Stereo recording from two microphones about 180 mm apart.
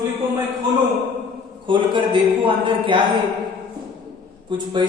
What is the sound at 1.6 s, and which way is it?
A man's voice, 25° right (ahead or behind).